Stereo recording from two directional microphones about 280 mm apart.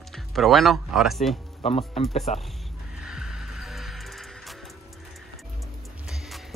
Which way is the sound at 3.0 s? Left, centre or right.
Centre.